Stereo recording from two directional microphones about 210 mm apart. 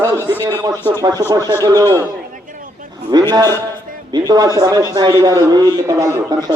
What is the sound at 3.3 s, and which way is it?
A man's voice, 20° right (ahead or behind).